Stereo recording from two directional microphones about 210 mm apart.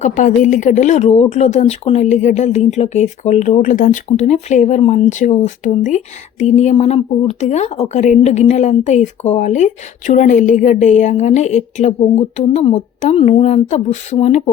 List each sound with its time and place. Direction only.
0.0 s speech: 35° left (ahead or behind)